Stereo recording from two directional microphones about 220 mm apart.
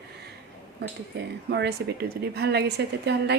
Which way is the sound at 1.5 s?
50° right (ahead or behind).